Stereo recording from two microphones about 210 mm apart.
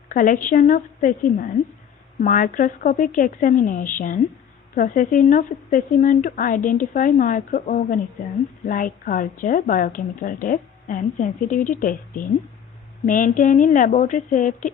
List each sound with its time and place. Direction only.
0.1 s a woman's voice: 40° left (ahead or behind)